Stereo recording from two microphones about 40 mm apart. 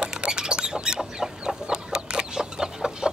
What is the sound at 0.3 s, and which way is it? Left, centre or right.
Chicken, centre.